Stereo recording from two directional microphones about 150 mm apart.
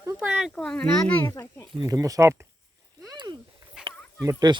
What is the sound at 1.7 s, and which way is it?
Speech, 25° right (ahead or behind).